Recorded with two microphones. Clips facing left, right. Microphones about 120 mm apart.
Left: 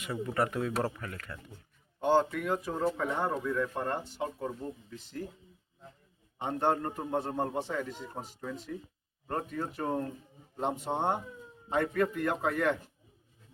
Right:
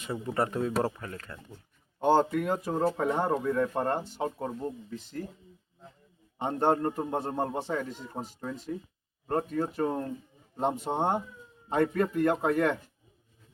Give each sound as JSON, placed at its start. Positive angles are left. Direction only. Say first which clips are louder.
{"t": 0.0, "sound": "speech", "louder": "right 1 dB", "side_deg": -30}
{"t": 2.0, "sound": "speech", "louder": "right 3 dB", "side_deg": -40}
{"t": 6.4, "sound": "a man's voice", "louder": "right 4 dB", "side_deg": -35}